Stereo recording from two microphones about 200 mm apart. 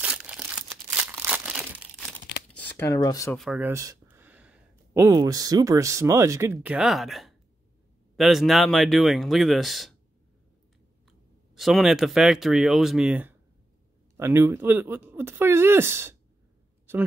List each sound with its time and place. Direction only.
0.0 s crumpling: 5° right (ahead or behind)
2.5 s speech: 10° left (ahead or behind)
3.3 s speech: 5° right (ahead or behind)
11.1 s speech: centre (ahead or behind)